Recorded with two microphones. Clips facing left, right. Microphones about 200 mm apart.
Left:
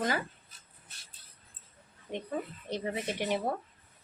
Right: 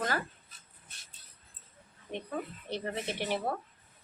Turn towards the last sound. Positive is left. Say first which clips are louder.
# left 2 dB
turn(degrees=15)  # may be behind; listen again after turning